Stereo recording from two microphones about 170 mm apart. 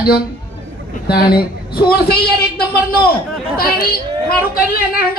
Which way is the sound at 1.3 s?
65° left (ahead or behind).